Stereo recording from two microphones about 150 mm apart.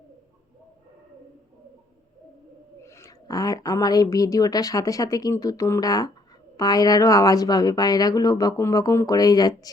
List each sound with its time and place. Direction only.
2.8 s speech: 20° left (ahead or behind)